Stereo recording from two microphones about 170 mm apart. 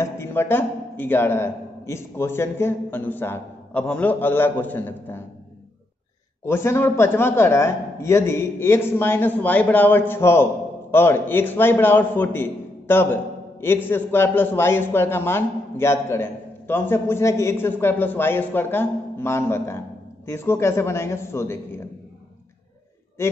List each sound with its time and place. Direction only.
0.0 s a man's voice: 15° left (ahead or behind)
6.4 s a man's voice: 15° left (ahead or behind)
23.2 s a man's voice: 15° left (ahead or behind)